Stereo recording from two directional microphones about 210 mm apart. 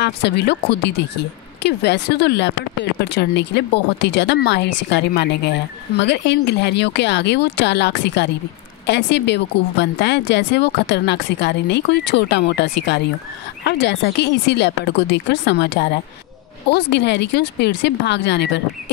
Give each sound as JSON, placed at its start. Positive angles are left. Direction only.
{"t": 0.0, "sound": "speech", "side_deg": 55}